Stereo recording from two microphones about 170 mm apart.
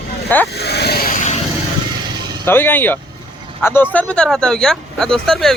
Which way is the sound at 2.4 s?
10° left (ahead or behind).